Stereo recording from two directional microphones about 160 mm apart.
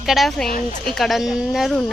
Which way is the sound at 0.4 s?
60° left (ahead or behind).